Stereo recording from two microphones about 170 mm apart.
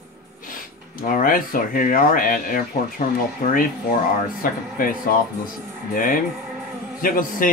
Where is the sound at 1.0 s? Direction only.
55° left (ahead or behind).